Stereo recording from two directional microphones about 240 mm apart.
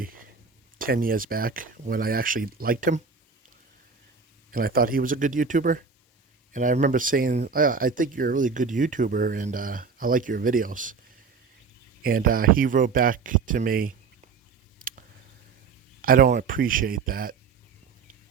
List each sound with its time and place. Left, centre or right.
0.0 s a sound: right
0.8 s speech: right
4.5 s speech: right
12.0 s speech: right
14.8 s a sound: right
16.0 s speech: right